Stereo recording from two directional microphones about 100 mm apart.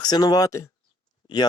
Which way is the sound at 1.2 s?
45° left (ahead or behind).